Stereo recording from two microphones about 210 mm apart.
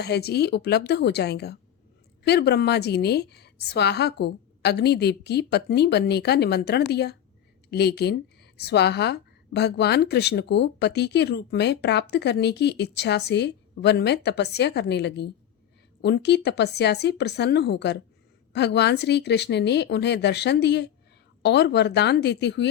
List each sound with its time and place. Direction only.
0.0 s a woman's voice: 50° left (ahead or behind)